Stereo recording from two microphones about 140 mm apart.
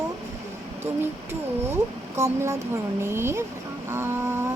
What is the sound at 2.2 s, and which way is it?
Speech, 20° right (ahead or behind).